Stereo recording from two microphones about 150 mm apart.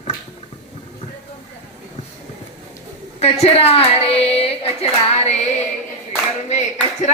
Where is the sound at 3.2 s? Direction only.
45° left (ahead or behind).